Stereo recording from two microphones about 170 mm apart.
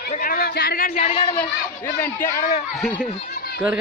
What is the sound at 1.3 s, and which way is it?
Speech, 10° left (ahead or behind).